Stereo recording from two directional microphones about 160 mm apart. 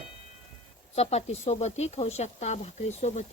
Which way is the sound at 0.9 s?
40° left (ahead or behind).